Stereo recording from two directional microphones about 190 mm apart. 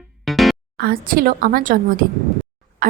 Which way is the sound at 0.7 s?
50° right (ahead or behind).